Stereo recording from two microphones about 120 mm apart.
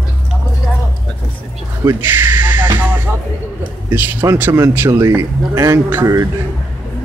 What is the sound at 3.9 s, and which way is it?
Speech, 15° right (ahead or behind).